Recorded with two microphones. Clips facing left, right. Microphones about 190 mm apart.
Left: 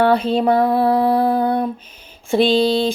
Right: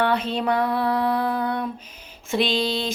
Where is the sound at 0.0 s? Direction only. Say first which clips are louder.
Left 7 dB; 35° left (ahead or behind).